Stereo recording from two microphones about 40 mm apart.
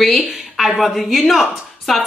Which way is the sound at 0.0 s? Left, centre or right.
Centre.